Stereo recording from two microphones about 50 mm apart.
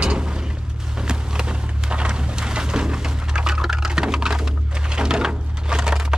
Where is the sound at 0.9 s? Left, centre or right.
Centre.